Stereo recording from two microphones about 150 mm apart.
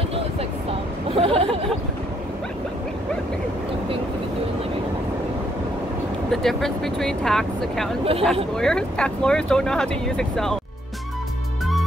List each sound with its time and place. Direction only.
1.1 s speech: 40° right (ahead or behind)
6.3 s speech: centre (ahead or behind)
8.0 s speech: 40° right (ahead or behind)
8.5 s speech: 5° left (ahead or behind)